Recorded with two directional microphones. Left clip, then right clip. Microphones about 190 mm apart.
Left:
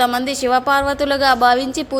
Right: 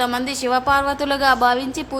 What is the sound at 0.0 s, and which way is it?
A woman's voice, 15° left (ahead or behind).